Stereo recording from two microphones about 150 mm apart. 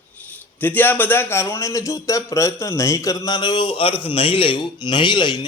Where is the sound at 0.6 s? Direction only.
10° left (ahead or behind).